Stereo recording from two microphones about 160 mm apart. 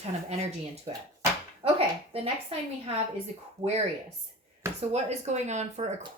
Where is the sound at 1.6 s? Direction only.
40° right (ahead or behind).